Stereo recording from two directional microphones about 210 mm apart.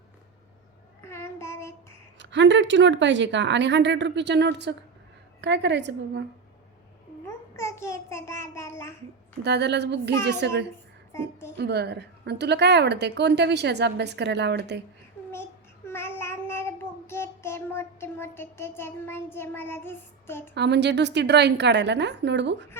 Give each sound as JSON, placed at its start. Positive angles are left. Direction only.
{"t": 1.0, "sound": "child singing", "side_deg": 10}
{"t": 2.1, "sound": "a woman's voice", "side_deg": -60}
{"t": 7.5, "sound": "child singing", "side_deg": 15}
{"t": 9.4, "sound": "a woman's voice", "side_deg": -55}
{"t": 11.1, "sound": "a woman's voice", "side_deg": 10}
{"t": 11.5, "sound": "a woman's voice", "side_deg": -50}
{"t": 15.9, "sound": "child singing", "side_deg": 10}
{"t": 20.6, "sound": "a woman's voice", "side_deg": -55}